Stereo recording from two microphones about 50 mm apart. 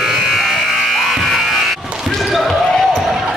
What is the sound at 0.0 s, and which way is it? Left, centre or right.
Electric shaver, centre.